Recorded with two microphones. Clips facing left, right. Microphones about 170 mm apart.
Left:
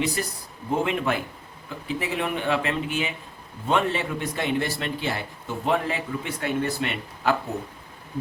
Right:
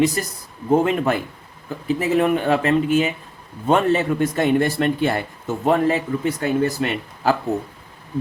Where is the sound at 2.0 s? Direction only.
45° right (ahead or behind).